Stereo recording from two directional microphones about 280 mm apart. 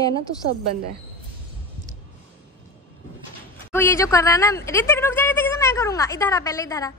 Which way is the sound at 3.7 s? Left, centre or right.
Centre.